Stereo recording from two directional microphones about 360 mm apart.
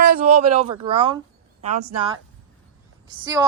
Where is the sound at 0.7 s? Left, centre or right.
Centre.